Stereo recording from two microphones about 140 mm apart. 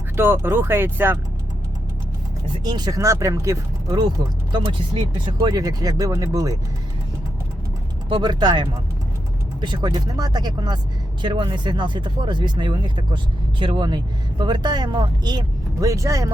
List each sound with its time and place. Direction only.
0.2 s speech: 15° right (ahead or behind)
2.6 s speech: 30° right (ahead or behind)
5.2 s speech: 30° right (ahead or behind)
8.1 s speech: 30° right (ahead or behind)